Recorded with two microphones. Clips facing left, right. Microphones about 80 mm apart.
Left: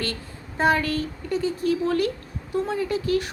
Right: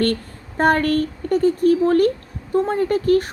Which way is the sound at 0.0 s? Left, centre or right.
Right.